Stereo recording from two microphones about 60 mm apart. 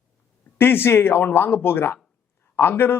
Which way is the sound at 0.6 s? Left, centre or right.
Left.